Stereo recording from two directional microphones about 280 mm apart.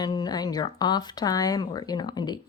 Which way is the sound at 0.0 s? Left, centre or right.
Centre.